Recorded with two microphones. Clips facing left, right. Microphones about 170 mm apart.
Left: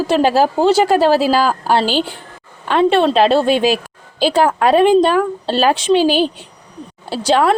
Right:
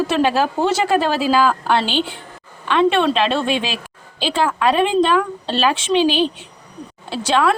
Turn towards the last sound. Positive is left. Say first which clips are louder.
# left 3 dB
turn(degrees=35)  # may be behind; listen again after turning